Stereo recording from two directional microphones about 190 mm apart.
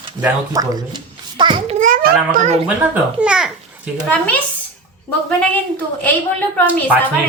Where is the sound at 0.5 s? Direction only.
20° right (ahead or behind); by 2.5 s 45° right (ahead or behind).